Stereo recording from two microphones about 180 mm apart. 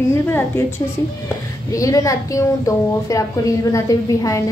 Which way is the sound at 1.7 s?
20° left (ahead or behind).